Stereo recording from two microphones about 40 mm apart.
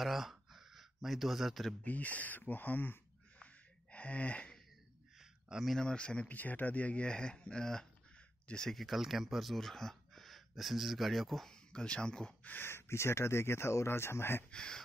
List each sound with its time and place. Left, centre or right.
0.0 s speech: centre
1.9 s speech: left
3.3 s gasp: left
5.2 s a sound: centre
5.8 s speech: left
6.2 s speech: left
7.1 s speech: left
8.7 s speech: centre
9.6 s speech: centre
11.5 s speech: left
12.6 s speech: left
14.5 s speech: centre